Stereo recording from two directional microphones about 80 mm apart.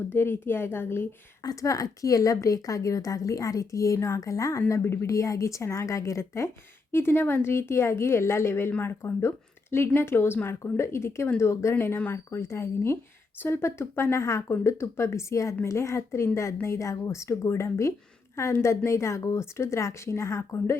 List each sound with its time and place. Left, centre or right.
0.1 s a woman's voice: left
1.5 s a woman's voice: left
6.9 s speech: left